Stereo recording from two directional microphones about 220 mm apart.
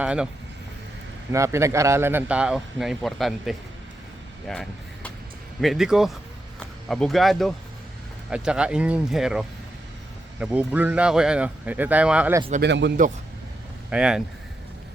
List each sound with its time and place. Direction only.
0.0 s speech: 5° right (ahead or behind)
1.3 s speech: 15° right (ahead or behind)
5.5 s speech: centre (ahead or behind)
12.5 s speech: 50° right (ahead or behind)
13.9 s speech: 5° right (ahead or behind)